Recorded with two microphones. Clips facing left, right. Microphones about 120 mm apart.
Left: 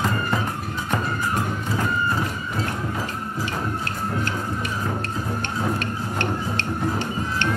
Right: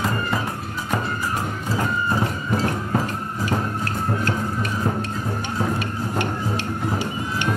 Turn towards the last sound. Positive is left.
turn(degrees=-10)  # may be behind; listen again after turning